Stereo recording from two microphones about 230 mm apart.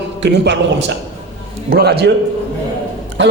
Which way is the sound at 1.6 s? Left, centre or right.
Right.